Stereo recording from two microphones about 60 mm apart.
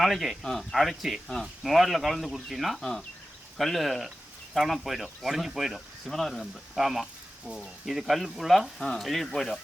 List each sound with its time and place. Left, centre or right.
0.0 s speech: centre